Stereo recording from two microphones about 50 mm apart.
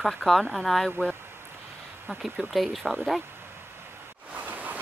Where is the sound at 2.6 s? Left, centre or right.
Centre.